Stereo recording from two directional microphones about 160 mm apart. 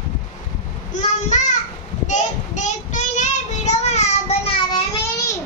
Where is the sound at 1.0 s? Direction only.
45° left (ahead or behind).